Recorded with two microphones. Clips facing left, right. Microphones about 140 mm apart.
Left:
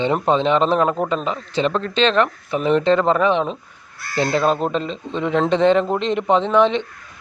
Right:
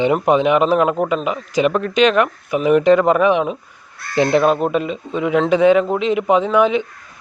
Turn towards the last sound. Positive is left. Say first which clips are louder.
# right 1 dB
turn(degrees=-5)  # may be behind; listen again after turning